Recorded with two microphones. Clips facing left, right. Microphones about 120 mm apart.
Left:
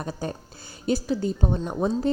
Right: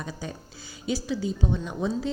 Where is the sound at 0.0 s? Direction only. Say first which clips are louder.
Left 5 dB; 55° left (ahead or behind).